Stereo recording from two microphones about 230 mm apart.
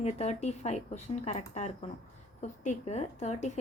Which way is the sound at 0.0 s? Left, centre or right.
Left.